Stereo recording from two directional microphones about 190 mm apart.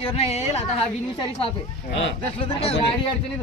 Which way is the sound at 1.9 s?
70° left (ahead or behind).